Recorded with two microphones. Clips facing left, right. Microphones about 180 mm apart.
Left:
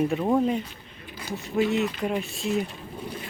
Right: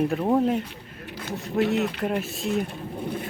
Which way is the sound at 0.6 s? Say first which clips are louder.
Right 4 dB; 75° right (ahead or behind).